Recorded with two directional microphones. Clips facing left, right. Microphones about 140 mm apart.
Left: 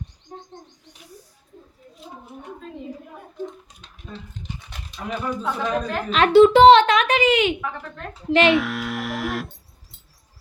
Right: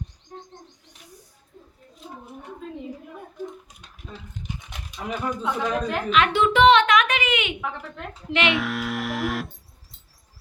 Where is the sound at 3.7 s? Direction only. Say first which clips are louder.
Left 2 dB; 10° right (ahead or behind).